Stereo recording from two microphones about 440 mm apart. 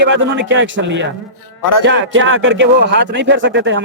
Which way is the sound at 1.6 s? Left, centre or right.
Left.